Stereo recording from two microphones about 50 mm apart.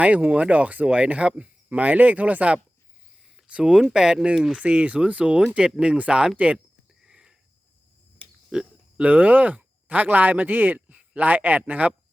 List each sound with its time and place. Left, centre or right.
0.0 s speech: right
3.3 s a sound: centre
3.8 s speech: centre
6.3 s speech: right
7.0 s a sound: centre
8.5 s speech: centre
9.0 s a man's voice: right